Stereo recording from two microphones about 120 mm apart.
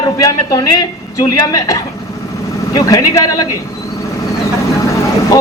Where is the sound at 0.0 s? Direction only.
30° left (ahead or behind).